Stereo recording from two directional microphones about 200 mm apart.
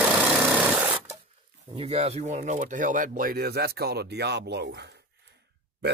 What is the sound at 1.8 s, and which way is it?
A man's voice, 30° right (ahead or behind).